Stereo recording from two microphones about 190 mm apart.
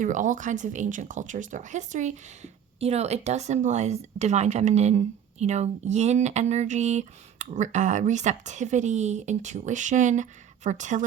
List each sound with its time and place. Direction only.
0.0 s speech: 40° right (ahead or behind)